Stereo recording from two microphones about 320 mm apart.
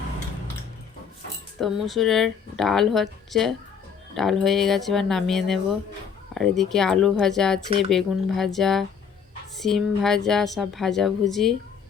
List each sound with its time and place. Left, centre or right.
1.6 s a woman's voice: centre